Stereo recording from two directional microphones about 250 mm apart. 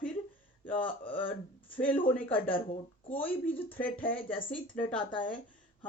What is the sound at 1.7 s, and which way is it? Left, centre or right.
Speech, centre.